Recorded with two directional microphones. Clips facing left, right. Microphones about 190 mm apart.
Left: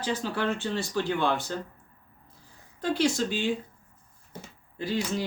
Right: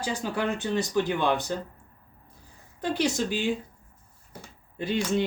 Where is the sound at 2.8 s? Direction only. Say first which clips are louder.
Left 1 dB; 15° right (ahead or behind).